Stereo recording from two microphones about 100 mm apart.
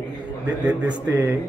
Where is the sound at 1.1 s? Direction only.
20° right (ahead or behind).